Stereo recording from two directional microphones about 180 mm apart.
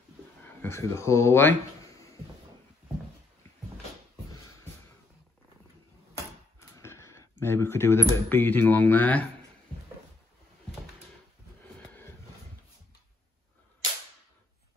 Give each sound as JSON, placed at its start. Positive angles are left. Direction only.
{"t": 0.6, "sound": "speech", "side_deg": 15}
{"t": 6.8, "sound": "a sound", "side_deg": 15}
{"t": 8.1, "sound": "speech", "side_deg": 10}